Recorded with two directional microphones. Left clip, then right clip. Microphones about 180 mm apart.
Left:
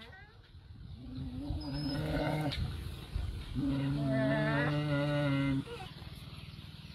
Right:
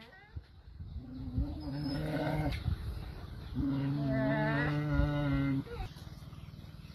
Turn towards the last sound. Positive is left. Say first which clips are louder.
# left 2 dB
turn(degrees=0)  # may be behind; listen again after turning